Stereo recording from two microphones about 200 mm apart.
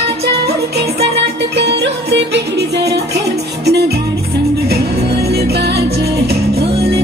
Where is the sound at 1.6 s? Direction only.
60° right (ahead or behind).